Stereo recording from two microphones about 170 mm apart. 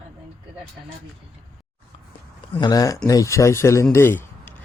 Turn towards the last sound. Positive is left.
turn(degrees=15)  # may be behind; listen again after turning